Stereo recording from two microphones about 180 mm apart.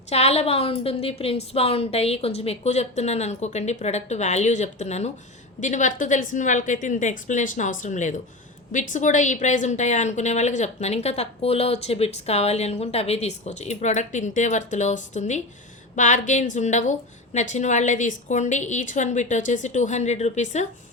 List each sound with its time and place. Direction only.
0.1 s a woman's voice: 35° left (ahead or behind)